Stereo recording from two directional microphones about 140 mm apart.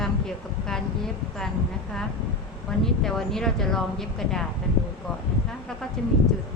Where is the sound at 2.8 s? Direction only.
5° left (ahead or behind).